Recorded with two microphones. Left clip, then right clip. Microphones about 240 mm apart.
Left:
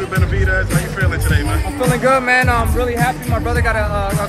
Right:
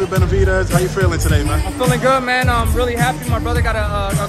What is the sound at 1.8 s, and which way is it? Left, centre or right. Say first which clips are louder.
Music: left 1 dB; centre.